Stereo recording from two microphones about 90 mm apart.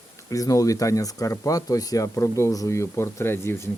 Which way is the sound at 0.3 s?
40° left (ahead or behind).